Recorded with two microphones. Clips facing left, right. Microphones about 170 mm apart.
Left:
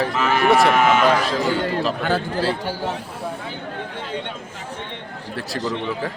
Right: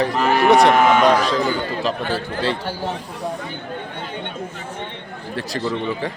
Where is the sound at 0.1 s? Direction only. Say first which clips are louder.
Right 3 dB; 35° right (ahead or behind).